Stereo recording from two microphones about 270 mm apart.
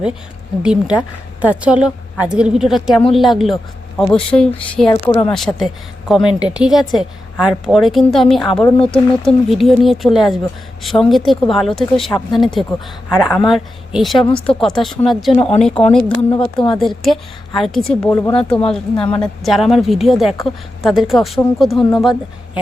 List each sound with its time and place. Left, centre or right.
0.6 s speech: centre
15.4 s speech: left
15.8 s speech: centre
16.3 s speech: centre
16.7 s speech: centre